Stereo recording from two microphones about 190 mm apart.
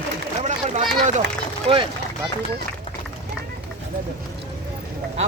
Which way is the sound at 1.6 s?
25° right (ahead or behind).